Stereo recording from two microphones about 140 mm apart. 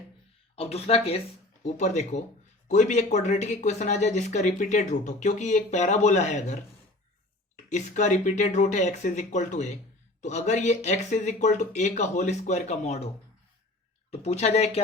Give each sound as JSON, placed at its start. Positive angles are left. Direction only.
{"t": 0.5, "sound": "speech", "side_deg": 45}
{"t": 1.6, "sound": "speech", "side_deg": 55}
{"t": 14.1, "sound": "speech", "side_deg": 50}